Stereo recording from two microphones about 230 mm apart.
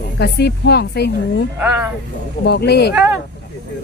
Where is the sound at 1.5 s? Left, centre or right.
Centre.